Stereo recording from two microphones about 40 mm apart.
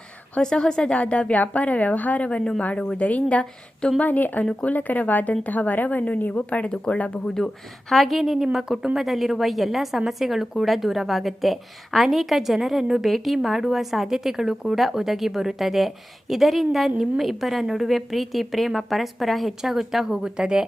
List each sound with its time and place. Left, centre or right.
0.4 s speech: centre
0.9 s a woman's voice: left
2.7 s speech: left
3.0 s a woman's voice: left
3.8 s speech: centre
4.0 s a woman's voice: left
6.7 s speech: left
7.3 s a woman's voice: centre